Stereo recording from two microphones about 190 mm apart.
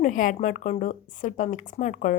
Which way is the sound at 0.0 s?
45° left (ahead or behind).